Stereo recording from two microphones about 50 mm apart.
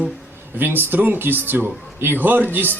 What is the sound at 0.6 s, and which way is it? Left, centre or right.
A man's voice, right.